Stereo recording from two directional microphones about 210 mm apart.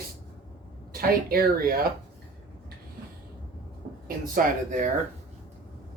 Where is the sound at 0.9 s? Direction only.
45° right (ahead or behind).